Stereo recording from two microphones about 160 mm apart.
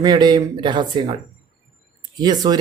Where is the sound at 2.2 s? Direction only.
25° right (ahead or behind).